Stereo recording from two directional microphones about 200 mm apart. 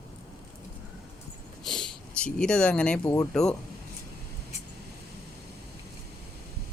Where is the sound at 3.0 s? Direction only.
15° left (ahead or behind).